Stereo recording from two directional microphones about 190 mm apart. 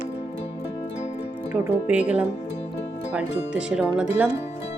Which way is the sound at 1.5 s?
10° right (ahead or behind).